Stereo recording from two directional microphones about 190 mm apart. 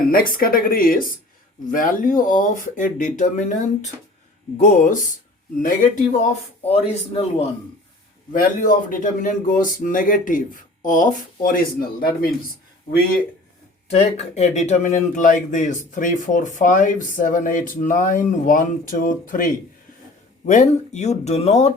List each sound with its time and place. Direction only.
0.1 s speech: 50° left (ahead or behind)
6.6 s speech: 35° left (ahead or behind)
8.3 s speech: 45° left (ahead or behind)
13.9 s speech: 35° left (ahead or behind)